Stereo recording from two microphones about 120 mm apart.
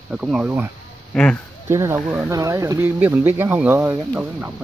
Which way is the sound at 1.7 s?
25° right (ahead or behind).